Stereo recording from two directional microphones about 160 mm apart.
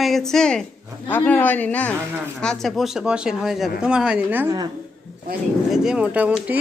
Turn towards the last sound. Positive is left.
turn(degrees=-10)  # may be behind; listen again after turning